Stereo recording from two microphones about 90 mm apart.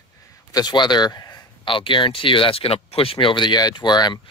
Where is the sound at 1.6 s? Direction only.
70° left (ahead or behind).